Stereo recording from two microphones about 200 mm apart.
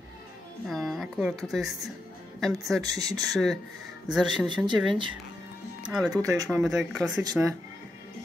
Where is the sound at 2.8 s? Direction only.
20° right (ahead or behind).